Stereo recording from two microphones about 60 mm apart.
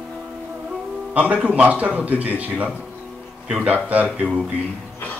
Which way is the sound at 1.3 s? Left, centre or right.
Right.